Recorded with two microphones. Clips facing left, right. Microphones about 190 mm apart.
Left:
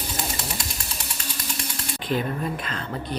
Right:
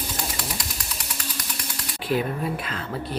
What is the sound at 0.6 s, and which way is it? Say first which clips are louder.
Ratchet: left 1 dB; 25° left (ahead or behind).